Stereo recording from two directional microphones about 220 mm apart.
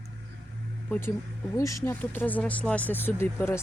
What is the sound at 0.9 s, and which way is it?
Speech, 10° left (ahead or behind).